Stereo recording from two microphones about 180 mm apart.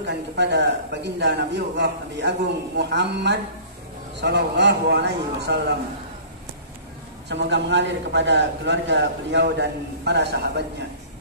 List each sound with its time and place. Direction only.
0.0 s a man's voice: 70° right (ahead or behind)
7.2 s a man's voice: 75° right (ahead or behind)